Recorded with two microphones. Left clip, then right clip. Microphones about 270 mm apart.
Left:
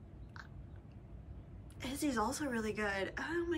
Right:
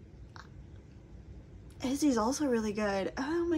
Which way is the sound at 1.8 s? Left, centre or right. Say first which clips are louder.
Right 7 dB; centre.